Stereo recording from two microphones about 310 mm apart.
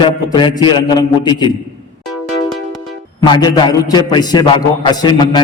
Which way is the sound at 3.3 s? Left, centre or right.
Centre.